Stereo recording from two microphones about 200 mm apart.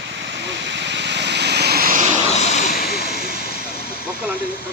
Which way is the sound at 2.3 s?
35° left (ahead or behind).